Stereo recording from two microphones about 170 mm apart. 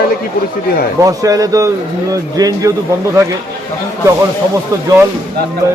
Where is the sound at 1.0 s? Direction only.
20° right (ahead or behind).